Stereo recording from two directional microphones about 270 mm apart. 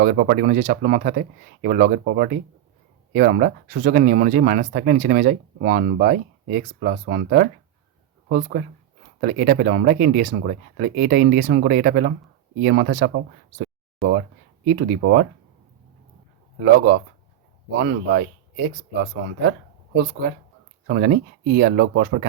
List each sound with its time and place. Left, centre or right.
0.0 s speech: right
14.7 s speech: right
16.6 s speech: right
20.8 s speech: right